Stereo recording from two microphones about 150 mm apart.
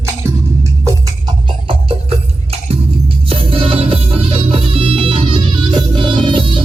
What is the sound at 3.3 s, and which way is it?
Music, 35° right (ahead or behind).